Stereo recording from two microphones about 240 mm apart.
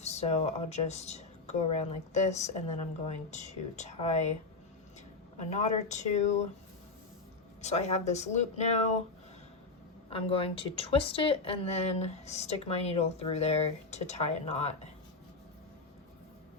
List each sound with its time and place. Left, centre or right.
0.0 s speech: left
5.5 s speech: left
7.6 s speech: left
10.1 s speech: left